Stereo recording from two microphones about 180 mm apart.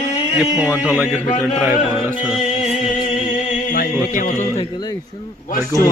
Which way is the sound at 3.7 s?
55° left (ahead or behind).